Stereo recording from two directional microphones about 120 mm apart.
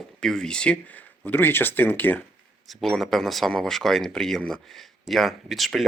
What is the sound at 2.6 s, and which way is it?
Speech, centre (ahead or behind).